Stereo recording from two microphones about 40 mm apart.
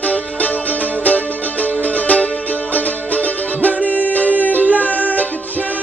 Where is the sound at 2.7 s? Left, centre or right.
Left.